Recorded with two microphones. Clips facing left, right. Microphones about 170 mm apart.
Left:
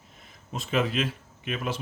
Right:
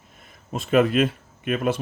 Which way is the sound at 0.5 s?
55° right (ahead or behind).